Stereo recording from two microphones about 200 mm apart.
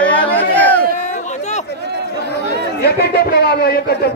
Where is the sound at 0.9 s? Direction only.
35° left (ahead or behind).